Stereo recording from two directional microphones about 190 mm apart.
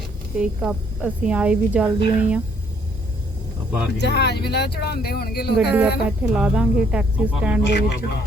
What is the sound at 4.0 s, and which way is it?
Speech, 60° left (ahead or behind).